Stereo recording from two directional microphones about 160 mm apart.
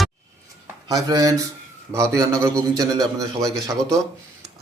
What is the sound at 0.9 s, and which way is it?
A man's voice, 20° right (ahead or behind).